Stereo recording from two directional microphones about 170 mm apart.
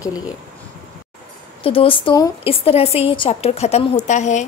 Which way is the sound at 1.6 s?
35° left (ahead or behind).